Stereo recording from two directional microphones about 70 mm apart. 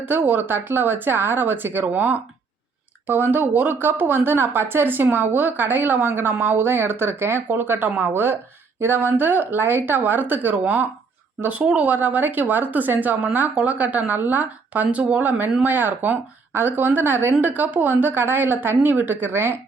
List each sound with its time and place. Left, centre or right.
0.0 s a woman's voice: right